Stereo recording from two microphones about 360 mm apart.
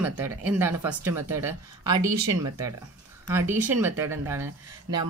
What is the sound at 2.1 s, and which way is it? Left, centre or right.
Speech, right.